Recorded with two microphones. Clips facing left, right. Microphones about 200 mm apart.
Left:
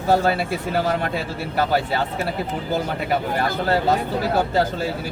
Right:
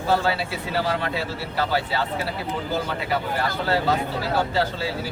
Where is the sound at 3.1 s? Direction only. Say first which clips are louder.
Left 4 dB; 50° left (ahead or behind).